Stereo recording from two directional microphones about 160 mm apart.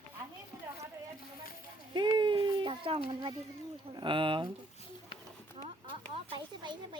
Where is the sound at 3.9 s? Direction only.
30° right (ahead or behind).